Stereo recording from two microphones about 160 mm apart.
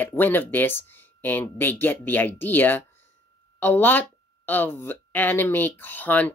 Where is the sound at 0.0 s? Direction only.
10° left (ahead or behind).